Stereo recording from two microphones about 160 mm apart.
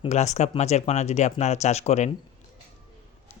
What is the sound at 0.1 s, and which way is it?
Speech, 45° left (ahead or behind).